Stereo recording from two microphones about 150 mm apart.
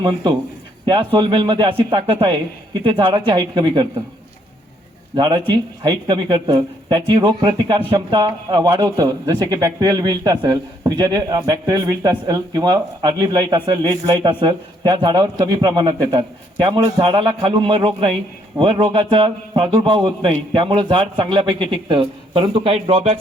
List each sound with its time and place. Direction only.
0.0 s a man's voice: 30° right (ahead or behind)
5.1 s a man's voice: 30° right (ahead or behind)